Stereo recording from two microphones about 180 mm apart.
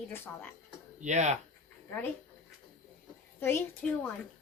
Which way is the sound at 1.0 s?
40° right (ahead or behind).